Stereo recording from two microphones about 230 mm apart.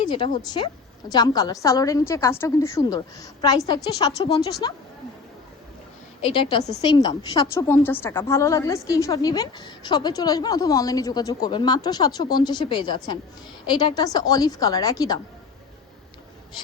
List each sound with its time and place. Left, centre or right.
0.1 s a woman's voice: centre
6.2 s a woman's voice: left